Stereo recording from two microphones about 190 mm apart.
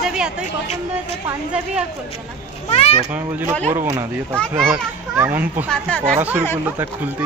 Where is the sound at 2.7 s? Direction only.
30° left (ahead or behind).